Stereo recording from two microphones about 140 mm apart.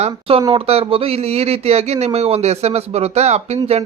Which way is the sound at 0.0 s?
45° right (ahead or behind).